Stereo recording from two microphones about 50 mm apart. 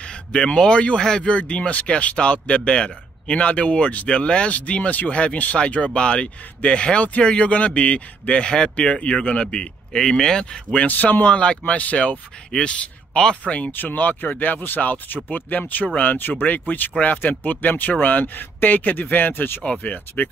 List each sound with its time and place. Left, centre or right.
0.0 s speech: centre
10.9 s speech: left
11.2 s speech: left
13.7 s speech: left